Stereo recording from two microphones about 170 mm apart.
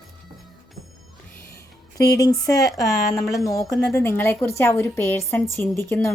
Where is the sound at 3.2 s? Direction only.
Centre (ahead or behind).